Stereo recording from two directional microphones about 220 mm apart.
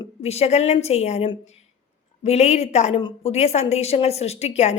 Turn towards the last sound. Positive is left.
turn(degrees=30)  # may be behind; listen again after turning